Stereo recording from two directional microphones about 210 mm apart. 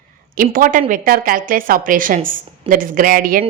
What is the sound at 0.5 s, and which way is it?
A woman's voice, 40° right (ahead or behind).